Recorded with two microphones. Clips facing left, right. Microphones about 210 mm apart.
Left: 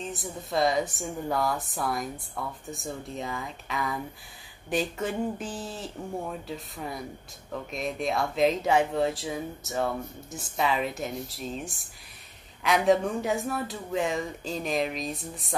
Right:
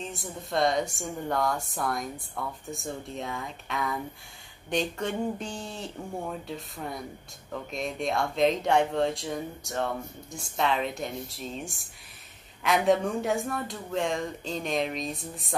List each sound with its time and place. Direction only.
0.0 s a woman's voice: centre (ahead or behind)